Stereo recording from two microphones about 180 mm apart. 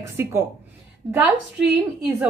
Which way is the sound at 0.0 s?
15° right (ahead or behind).